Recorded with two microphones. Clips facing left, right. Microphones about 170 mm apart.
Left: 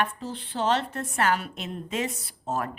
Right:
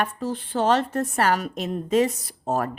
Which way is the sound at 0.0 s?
45° right (ahead or behind).